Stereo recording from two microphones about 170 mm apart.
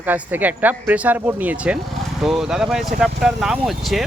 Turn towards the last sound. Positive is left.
turn(degrees=0)  # may be behind; listen again after turning